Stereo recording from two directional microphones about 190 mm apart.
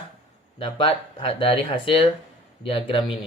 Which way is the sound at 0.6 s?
30° left (ahead or behind).